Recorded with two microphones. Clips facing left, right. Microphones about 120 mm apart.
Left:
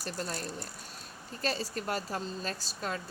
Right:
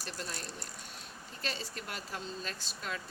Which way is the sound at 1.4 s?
40° left (ahead or behind).